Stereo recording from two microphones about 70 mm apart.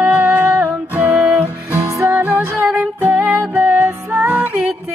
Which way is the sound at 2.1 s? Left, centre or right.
Right.